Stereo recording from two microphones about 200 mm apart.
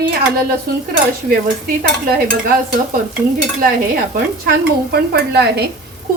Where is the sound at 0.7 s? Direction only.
50° right (ahead or behind).